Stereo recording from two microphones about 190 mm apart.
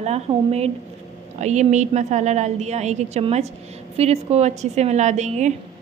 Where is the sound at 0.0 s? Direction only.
35° right (ahead or behind).